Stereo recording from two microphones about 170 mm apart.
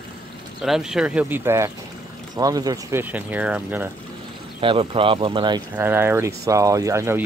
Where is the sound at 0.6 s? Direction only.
Centre (ahead or behind); by 3.0 s 20° right (ahead or behind).